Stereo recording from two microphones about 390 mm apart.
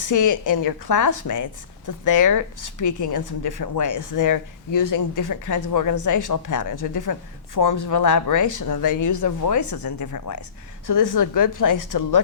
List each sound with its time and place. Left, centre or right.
0.0 s speech: left